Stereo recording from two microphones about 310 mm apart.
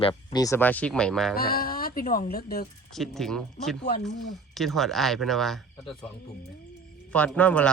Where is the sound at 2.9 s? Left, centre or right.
Centre.